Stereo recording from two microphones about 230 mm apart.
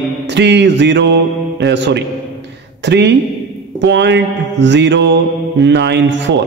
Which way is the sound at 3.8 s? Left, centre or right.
Right.